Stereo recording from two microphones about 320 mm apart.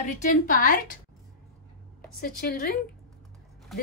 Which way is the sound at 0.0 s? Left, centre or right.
Left.